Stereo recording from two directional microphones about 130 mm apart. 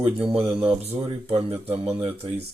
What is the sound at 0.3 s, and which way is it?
Speech, 45° right (ahead or behind).